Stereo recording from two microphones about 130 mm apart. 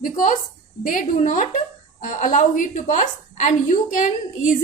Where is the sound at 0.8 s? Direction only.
90° left.